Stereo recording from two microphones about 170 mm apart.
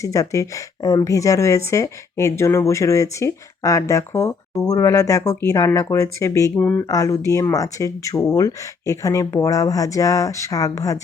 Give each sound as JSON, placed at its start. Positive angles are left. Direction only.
{"t": 0.0, "sound": "speech", "side_deg": 20}